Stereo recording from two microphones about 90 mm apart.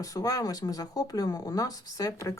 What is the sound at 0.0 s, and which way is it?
Speech, 40° left (ahead or behind).